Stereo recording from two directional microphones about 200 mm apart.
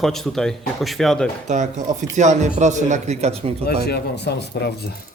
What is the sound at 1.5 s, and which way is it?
Speech, 35° right (ahead or behind).